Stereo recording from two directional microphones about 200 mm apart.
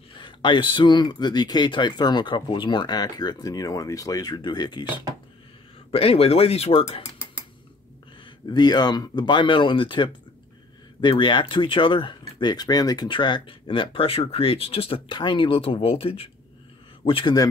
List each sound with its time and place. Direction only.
0.2 s speech: 25° left (ahead or behind)
5.9 s speech: 30° left (ahead or behind)
8.5 s speech: 20° left (ahead or behind)